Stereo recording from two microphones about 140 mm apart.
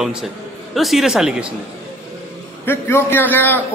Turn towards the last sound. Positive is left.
turn(degrees=15)  # may be behind; listen again after turning